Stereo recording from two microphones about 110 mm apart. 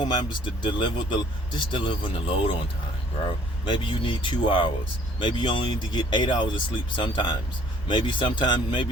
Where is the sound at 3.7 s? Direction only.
50° left (ahead or behind).